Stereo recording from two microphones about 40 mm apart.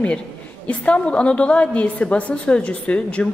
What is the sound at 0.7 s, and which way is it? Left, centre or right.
A woman's voice, left.